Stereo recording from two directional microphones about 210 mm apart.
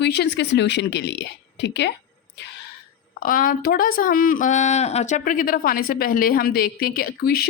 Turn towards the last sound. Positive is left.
turn(degrees=50)  # may be behind; listen again after turning